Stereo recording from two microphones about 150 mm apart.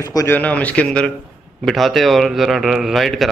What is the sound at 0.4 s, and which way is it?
A man's voice, 10° left (ahead or behind).